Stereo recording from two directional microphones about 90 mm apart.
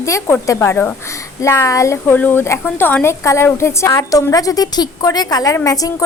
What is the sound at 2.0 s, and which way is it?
A woman's voice, 20° left (ahead or behind).